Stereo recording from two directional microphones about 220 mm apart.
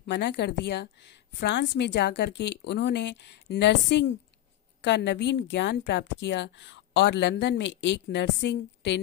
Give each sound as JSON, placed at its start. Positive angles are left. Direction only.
{"t": 0.0, "sound": "a woman's voice", "side_deg": 50}